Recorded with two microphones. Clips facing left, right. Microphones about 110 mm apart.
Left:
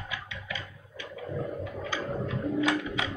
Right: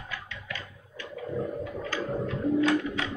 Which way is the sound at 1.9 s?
15° left (ahead or behind).